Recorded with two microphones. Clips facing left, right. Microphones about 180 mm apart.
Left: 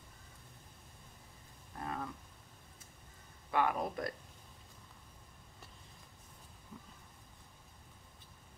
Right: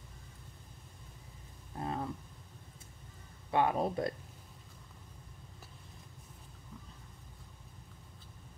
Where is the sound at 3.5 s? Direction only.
25° right (ahead or behind).